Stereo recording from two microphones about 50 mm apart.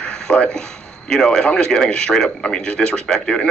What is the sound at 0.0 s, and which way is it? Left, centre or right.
A man's voice, centre.